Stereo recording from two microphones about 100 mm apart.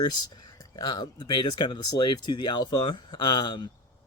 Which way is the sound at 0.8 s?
45° left (ahead or behind).